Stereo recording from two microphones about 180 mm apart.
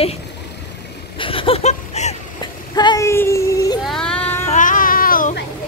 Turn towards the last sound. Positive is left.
turn(degrees=50)  # may be behind; listen again after turning